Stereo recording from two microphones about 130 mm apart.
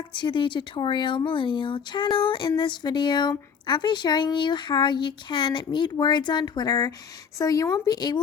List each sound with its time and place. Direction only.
0.1 s speech: 35° left (ahead or behind)